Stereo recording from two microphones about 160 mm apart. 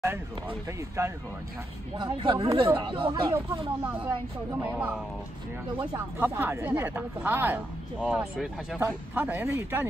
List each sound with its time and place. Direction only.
1.0 s speech: 20° right (ahead or behind)
2.0 s speech: 30° right (ahead or behind)
4.5 s speech: 10° right (ahead or behind)